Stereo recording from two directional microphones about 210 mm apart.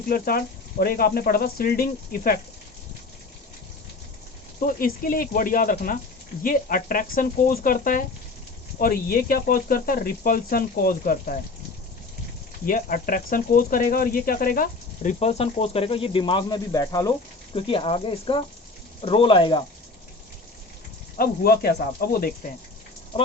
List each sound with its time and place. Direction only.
0.1 s speech: 45° left (ahead or behind)
4.6 s speech: 40° left (ahead or behind)
12.6 s speech: 40° left (ahead or behind); by 19.6 s 25° left (ahead or behind)
21.2 s speech: 45° left (ahead or behind)
23.1 s speech: 25° left (ahead or behind)